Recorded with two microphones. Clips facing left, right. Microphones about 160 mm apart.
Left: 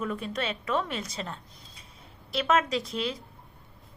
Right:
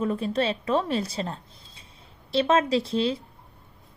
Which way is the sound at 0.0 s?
30° right (ahead or behind).